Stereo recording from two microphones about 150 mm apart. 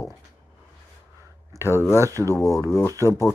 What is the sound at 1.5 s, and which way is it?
Speech, 15° right (ahead or behind).